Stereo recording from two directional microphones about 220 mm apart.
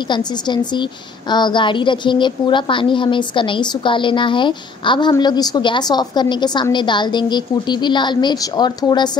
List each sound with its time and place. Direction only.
0.1 s a woman's voice: 20° left (ahead or behind)